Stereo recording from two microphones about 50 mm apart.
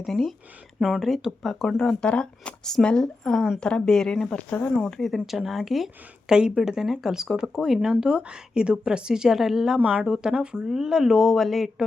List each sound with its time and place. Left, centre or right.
0.0 s a woman's voice: centre
1.8 s speech: centre
4.4 s speech: left
4.8 s a woman's voice: centre
6.3 s a woman's voice: centre
9.7 s speech: right; by 11.9 s centre